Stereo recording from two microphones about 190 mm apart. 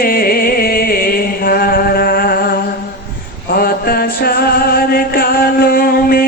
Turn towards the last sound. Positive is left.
turn(degrees=50)  # may be behind; listen again after turning